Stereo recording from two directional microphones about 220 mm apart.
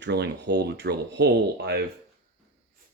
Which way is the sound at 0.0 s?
50° right (ahead or behind).